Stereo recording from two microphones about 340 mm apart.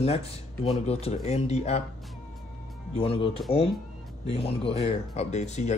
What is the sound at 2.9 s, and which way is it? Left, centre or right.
Speech, centre.